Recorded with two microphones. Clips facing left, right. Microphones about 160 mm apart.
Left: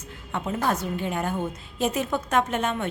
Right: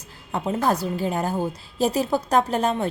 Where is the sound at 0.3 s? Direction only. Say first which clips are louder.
Right 3 dB; 35° right (ahead or behind).